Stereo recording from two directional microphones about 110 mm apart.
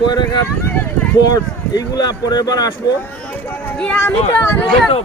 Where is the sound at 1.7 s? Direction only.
40° left (ahead or behind).